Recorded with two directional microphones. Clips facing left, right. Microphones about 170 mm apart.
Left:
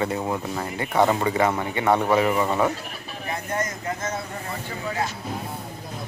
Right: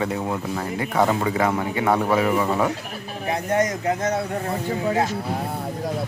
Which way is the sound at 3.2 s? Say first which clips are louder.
Right 7 dB; 75° right (ahead or behind).